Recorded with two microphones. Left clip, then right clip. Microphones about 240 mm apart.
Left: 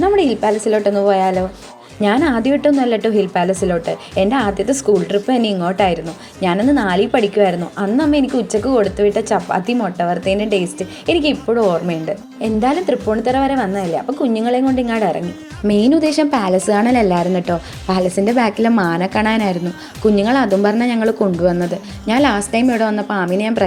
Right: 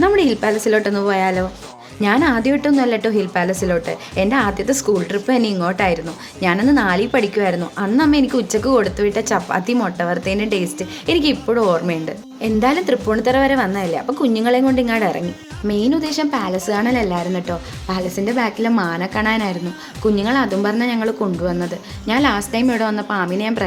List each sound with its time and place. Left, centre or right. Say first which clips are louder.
0.0 s a woman's voice: left 1 dB; centre
15.6 s a woman's voice: left 5 dB; centre